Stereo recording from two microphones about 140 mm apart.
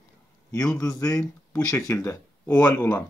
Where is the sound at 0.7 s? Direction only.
25° left (ahead or behind).